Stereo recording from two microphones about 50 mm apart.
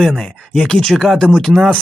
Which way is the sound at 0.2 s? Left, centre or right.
Centre.